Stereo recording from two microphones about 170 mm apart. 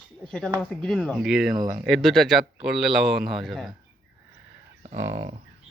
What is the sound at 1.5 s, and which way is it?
Speech, 20° right (ahead or behind).